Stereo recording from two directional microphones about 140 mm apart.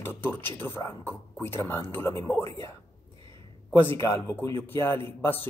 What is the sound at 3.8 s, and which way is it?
Speech, 20° left (ahead or behind).